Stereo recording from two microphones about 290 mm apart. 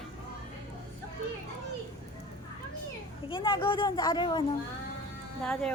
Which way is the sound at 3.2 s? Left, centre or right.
Centre.